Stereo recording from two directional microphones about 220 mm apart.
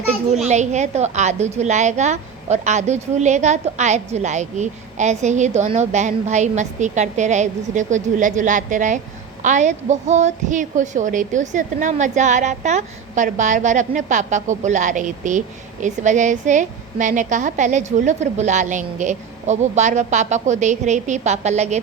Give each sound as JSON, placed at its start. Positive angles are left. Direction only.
{"t": 0.4, "sound": "a woman's voice", "side_deg": -30}